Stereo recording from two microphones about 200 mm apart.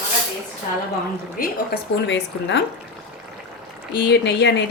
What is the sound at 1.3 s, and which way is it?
Speech, 45° left (ahead or behind).